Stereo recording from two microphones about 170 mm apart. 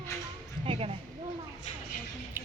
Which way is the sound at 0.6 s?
35° right (ahead or behind).